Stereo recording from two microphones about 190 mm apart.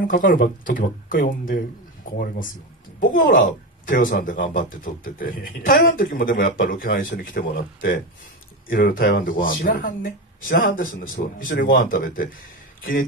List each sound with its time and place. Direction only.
0.0 s a woman's voice: 45° left (ahead or behind)